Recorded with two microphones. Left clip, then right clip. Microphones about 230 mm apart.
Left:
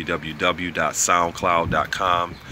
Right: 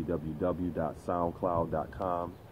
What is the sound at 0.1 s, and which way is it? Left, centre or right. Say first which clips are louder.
Speech: left 11 dB; left.